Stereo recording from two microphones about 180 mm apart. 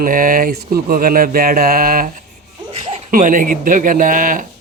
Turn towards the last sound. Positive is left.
turn(degrees=-50)  # may be behind; listen again after turning